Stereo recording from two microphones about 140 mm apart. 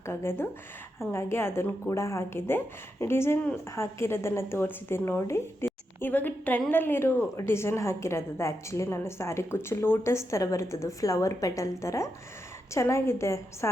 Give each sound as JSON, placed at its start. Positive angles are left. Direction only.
{"t": 0.0, "sound": "a woman's voice", "side_deg": 20}